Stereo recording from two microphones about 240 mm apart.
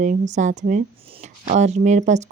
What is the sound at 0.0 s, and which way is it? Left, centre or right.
Speech, right.